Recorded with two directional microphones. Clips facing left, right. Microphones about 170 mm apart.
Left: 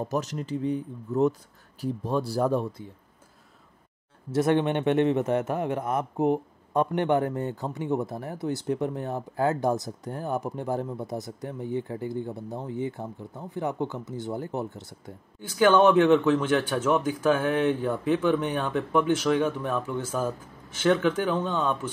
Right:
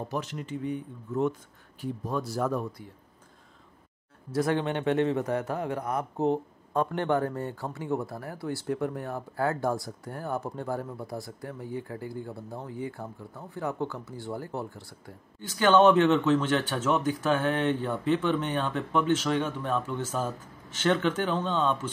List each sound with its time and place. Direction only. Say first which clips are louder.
0.1 s speech: left 4 dB; 40° left (ahead or behind)
4.3 s speech: left 4 dB; 20° left (ahead or behind)